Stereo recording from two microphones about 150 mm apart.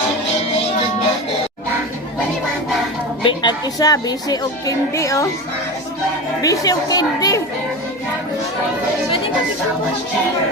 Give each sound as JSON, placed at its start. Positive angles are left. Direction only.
{"t": 3.2, "sound": "speech", "side_deg": 25}
{"t": 6.4, "sound": "speech", "side_deg": 20}